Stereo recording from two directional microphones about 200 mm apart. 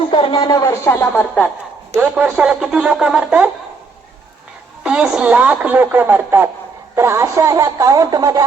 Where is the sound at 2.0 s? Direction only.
5° right (ahead or behind).